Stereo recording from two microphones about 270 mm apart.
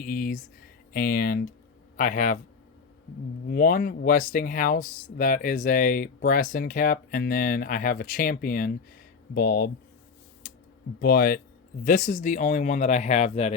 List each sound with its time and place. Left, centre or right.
0.0 s speech: left
3.5 s speech: left
11.0 s speech: left